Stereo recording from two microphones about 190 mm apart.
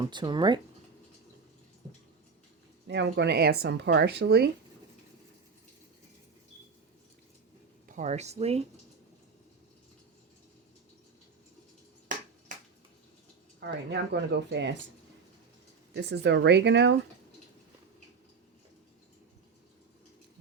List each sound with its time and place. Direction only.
0.0 s speech: 25° right (ahead or behind)
2.8 s speech: 65° right (ahead or behind)
7.9 s speech: 40° right (ahead or behind)
13.6 s speech: 65° right (ahead or behind)
16.0 s speech: 65° right (ahead or behind)